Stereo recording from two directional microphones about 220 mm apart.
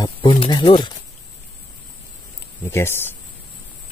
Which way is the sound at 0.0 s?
20° left (ahead or behind).